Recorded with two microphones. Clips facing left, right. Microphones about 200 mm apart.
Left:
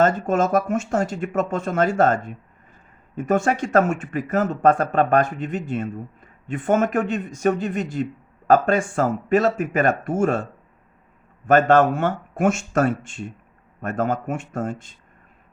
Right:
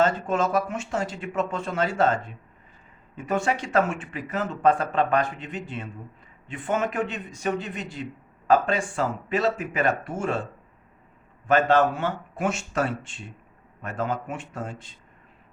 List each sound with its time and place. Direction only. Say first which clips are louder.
0.0 s speech: left 4 dB; 45° left (ahead or behind)
11.4 s speech: left 4 dB; 50° left (ahead or behind)